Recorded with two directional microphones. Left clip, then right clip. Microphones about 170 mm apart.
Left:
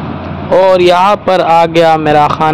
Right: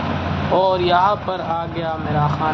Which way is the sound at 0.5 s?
40° left (ahead or behind).